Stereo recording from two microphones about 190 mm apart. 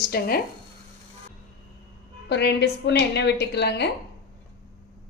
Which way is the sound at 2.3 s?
65° left (ahead or behind).